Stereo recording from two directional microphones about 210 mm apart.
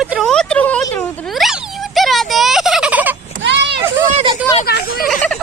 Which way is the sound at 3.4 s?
55° right (ahead or behind).